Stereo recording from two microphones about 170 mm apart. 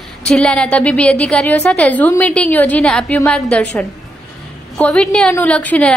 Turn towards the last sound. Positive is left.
turn(degrees=10)  # may be behind; listen again after turning